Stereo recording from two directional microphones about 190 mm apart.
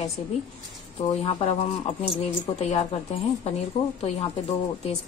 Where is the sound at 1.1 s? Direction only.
30° left (ahead or behind).